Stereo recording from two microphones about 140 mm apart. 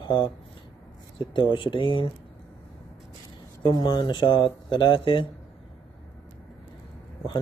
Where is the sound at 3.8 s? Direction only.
35° left (ahead or behind).